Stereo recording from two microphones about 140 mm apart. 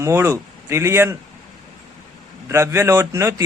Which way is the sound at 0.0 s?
20° right (ahead or behind).